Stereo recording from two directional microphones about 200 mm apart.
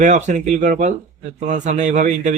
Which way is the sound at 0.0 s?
35° right (ahead or behind).